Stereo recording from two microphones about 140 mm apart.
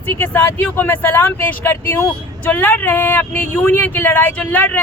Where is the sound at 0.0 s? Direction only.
15° left (ahead or behind).